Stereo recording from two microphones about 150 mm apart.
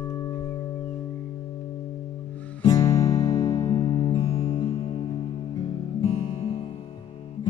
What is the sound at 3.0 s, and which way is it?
Music, 40° left (ahead or behind).